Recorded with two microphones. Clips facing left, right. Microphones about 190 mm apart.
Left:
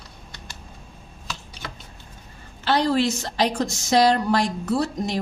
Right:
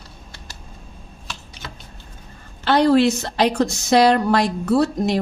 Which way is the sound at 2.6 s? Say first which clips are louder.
Right 6 dB; 60° right (ahead or behind).